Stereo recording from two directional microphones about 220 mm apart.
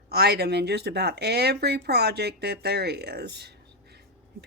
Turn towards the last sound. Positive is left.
turn(degrees=-50)  # may be behind; listen again after turning